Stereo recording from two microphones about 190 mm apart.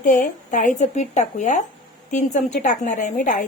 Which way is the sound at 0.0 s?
45° left (ahead or behind).